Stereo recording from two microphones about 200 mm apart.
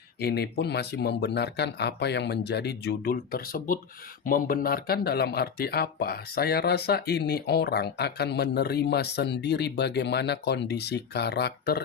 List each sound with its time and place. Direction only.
0.2 s speech: 55° left (ahead or behind)